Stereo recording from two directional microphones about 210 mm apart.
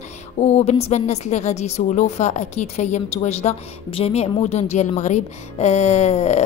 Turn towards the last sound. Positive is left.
turn(degrees=35)  # may be behind; listen again after turning